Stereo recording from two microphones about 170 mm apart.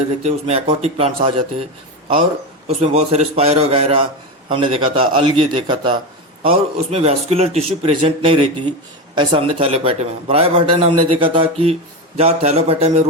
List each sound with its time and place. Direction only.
0.3 s a man's voice: 40° right (ahead or behind)
2.6 s a man's voice: 40° right (ahead or behind)